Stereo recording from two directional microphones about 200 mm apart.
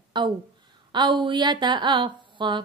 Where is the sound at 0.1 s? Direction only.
20° right (ahead or behind).